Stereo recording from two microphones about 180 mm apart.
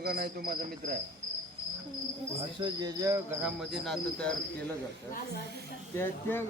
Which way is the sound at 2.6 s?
25° right (ahead or behind).